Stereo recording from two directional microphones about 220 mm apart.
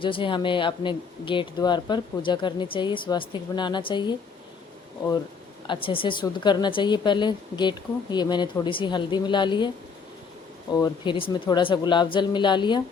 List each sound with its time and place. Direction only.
0.0 s speech: 25° left (ahead or behind)
5.6 s speech: 20° left (ahead or behind)